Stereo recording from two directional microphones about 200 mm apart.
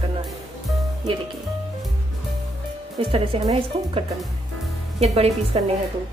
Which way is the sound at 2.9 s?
25° right (ahead or behind).